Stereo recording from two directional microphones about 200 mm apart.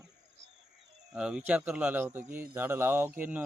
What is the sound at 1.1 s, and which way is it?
Speech, 5° right (ahead or behind).